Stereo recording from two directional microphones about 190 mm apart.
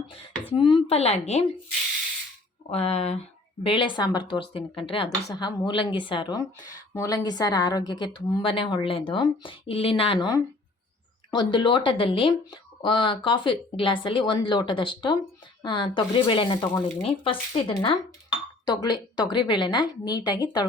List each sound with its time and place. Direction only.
0.5 s speech: 25° left (ahead or behind)
2.6 s a woman's voice: 30° left (ahead or behind)